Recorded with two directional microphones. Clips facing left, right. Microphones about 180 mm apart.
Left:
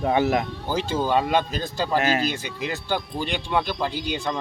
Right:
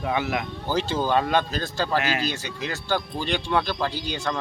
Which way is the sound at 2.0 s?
45° left (ahead or behind).